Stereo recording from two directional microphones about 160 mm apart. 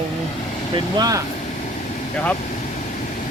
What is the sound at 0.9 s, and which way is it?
Speech, 25° right (ahead or behind).